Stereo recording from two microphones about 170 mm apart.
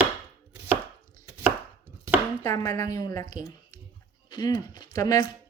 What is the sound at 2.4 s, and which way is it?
Speech, 20° left (ahead or behind).